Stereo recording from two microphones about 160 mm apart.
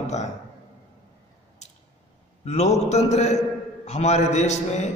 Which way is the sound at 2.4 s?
45° left (ahead or behind).